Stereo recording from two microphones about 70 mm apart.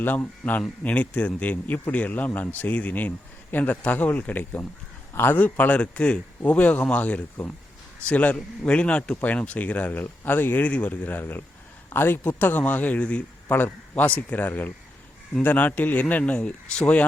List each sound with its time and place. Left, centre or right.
0.0 s a man's voice: left
13.5 s a man's voice: left